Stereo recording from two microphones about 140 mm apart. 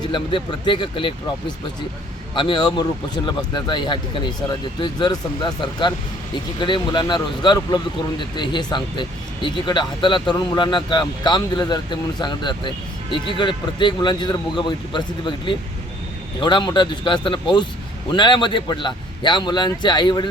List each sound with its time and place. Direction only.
0.1 s speech: 35° left (ahead or behind)
2.3 s speech: 35° left (ahead or behind)